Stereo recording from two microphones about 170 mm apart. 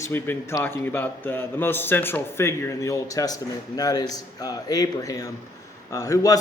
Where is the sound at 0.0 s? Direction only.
15° left (ahead or behind).